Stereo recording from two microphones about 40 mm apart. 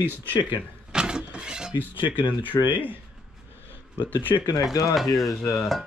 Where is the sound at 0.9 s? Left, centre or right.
Right.